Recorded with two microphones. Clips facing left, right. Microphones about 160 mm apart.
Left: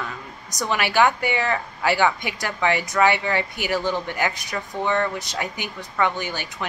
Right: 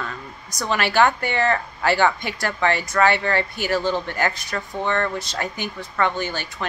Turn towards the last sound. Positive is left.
turn(degrees=15)  # may be behind; listen again after turning